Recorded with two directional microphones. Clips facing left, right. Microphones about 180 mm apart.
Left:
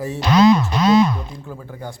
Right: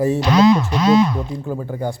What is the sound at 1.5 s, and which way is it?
Speech, 40° right (ahead or behind).